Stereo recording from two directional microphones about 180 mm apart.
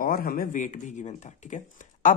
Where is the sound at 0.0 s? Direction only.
50° left (ahead or behind).